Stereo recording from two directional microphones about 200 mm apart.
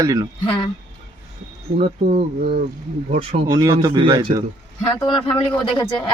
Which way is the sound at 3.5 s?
20° right (ahead or behind).